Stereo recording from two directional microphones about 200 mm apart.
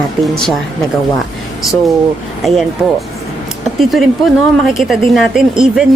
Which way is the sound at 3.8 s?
Centre (ahead or behind).